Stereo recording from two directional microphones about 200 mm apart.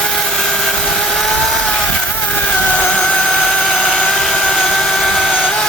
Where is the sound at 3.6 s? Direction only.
Centre (ahead or behind).